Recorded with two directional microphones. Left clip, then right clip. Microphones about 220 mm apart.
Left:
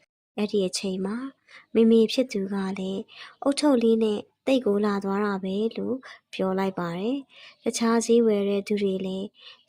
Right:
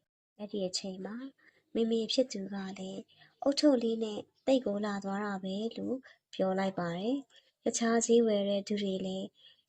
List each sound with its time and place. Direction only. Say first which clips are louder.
0.4 s speech: left 10 dB; 30° left (ahead or behind)